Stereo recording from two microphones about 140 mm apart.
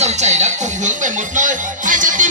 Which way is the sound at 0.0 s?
55° right (ahead or behind).